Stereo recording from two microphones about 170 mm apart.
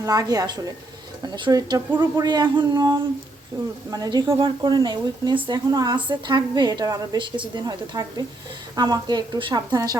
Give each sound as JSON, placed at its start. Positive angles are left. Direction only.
{"t": 0.0, "sound": "speech", "side_deg": -20}